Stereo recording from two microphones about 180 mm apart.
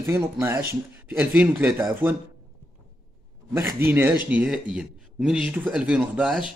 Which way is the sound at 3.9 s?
10° right (ahead or behind).